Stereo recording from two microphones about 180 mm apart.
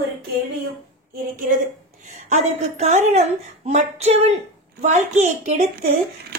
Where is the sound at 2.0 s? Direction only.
45° right (ahead or behind).